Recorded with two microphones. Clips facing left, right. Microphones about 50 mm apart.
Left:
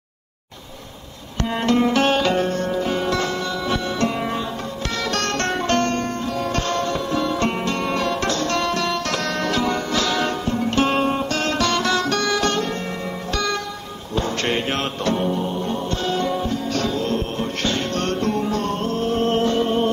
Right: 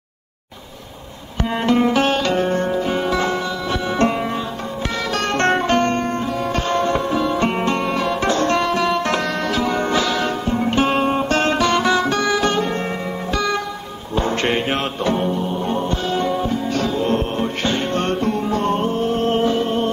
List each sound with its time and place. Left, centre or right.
1.6 s music: centre
2.7 s music: centre
5.1 s music: centre
7.8 s music: centre
8.3 s music: right
9.2 s music: centre
10.5 s music: centre
11.2 s music: right
11.5 s music: centre
18.2 s music: centre
18.6 s music: centre
18.9 s music: centre